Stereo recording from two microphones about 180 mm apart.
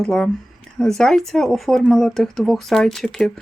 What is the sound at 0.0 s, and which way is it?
Speech, centre (ahead or behind).